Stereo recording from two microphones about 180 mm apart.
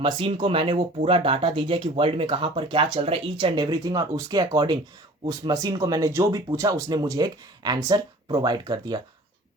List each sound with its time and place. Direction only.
0.0 s speech: 30° right (ahead or behind)